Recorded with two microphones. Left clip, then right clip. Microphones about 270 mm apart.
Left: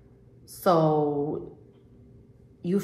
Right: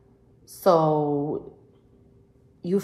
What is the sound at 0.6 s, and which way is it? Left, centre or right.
Speech, right.